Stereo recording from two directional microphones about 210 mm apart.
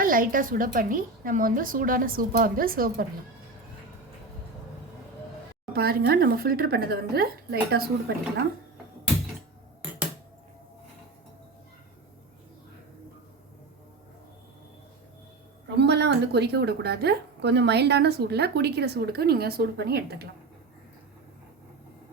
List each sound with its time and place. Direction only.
0.0 s a woman's voice: 40° right (ahead or behind)
5.7 s a woman's voice: 50° right (ahead or behind)
15.6 s a woman's voice: 55° right (ahead or behind)